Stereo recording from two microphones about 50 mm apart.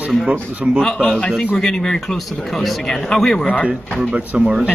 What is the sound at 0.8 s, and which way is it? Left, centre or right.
Speech, centre.